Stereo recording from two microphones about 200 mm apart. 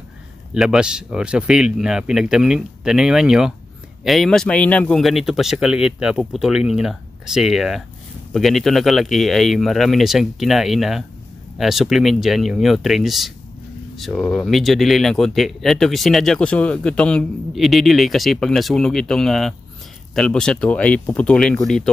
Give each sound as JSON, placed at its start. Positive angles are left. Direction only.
{"t": 0.6, "sound": "speech", "side_deg": -5}